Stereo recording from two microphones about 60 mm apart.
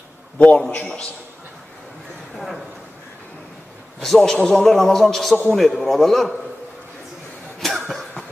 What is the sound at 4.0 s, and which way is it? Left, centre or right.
A man's voice, centre.